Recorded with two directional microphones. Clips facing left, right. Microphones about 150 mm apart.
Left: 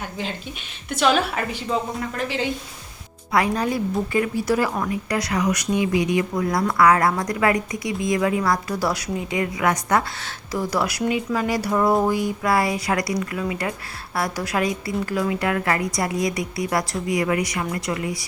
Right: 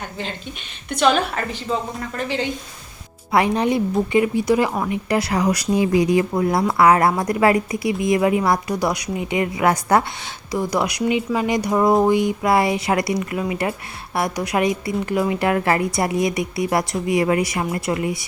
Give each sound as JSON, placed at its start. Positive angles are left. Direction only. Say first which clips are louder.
{"t": 0.9, "sound": "a woman's voice", "louder": "right 2 dB", "side_deg": 5}
{"t": 3.3, "sound": "speech", "louder": "right 3 dB", "side_deg": -25}
{"t": 5.0, "sound": "speech", "louder": "right 4 dB", "side_deg": -30}
{"t": 10.5, "sound": "speech", "louder": "right 2 dB", "side_deg": -15}